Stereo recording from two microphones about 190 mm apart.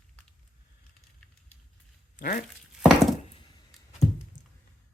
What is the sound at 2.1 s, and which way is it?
Speech, 50° left (ahead or behind).